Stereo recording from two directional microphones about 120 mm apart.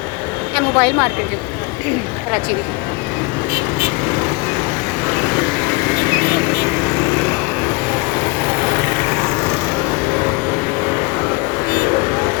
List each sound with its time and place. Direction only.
0.5 s a woman's voice: 25° left (ahead or behind)